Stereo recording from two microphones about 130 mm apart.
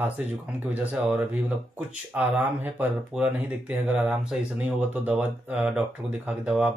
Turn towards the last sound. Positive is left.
turn(degrees=-10)  # may be behind; listen again after turning